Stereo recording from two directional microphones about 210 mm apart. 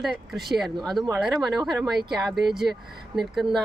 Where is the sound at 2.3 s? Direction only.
Centre (ahead or behind).